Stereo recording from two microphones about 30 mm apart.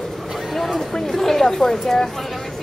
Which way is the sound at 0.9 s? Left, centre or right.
Centre.